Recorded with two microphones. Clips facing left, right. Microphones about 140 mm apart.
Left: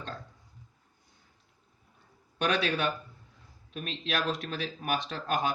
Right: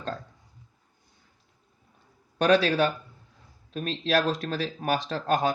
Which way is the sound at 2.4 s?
35° right (ahead or behind).